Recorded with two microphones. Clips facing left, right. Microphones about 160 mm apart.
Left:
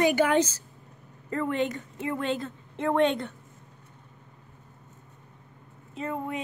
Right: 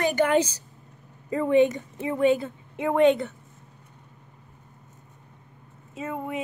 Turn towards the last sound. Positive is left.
turn(degrees=-5)  # may be behind; listen again after turning